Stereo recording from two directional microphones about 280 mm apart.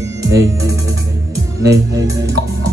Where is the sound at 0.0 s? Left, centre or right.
Centre.